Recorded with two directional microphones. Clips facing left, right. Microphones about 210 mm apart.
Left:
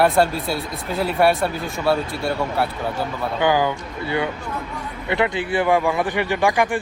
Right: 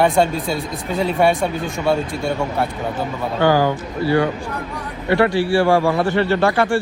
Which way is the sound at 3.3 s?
15° left (ahead or behind).